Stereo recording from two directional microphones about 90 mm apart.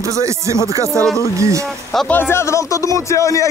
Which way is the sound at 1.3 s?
35° right (ahead or behind).